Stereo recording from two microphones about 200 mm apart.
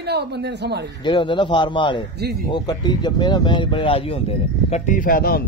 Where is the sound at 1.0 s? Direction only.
25° left (ahead or behind).